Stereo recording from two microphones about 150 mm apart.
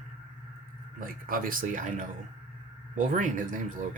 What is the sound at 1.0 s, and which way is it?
Speech, 70° right (ahead or behind).